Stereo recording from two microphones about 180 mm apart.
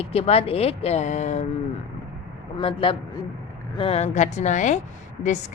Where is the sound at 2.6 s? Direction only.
30° left (ahead or behind).